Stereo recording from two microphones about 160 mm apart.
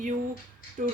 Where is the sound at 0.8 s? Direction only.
55° right (ahead or behind).